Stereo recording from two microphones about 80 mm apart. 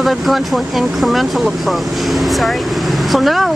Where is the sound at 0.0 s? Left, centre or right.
Centre.